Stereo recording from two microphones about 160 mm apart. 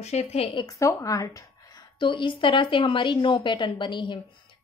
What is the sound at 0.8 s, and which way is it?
Speech, 20° left (ahead or behind).